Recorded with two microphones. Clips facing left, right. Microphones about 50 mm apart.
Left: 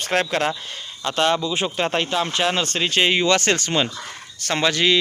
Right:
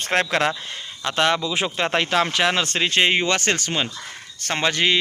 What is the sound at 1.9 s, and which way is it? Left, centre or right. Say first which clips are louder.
Speech: right 5 dB; right.